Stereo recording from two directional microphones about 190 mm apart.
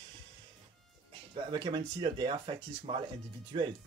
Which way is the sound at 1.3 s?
25° right (ahead or behind).